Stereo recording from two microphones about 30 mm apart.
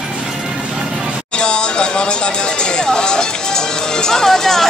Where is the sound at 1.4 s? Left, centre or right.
Left.